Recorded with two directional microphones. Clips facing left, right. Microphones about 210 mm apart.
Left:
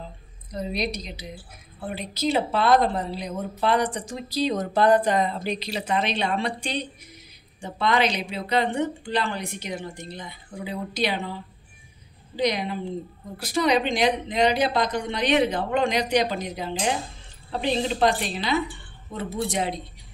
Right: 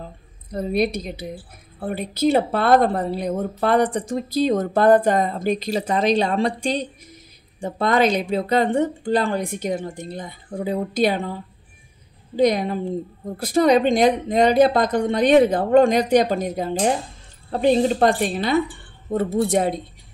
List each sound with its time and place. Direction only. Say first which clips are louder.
0.0 s a woman's voice: right 3 dB; 50° right (ahead or behind)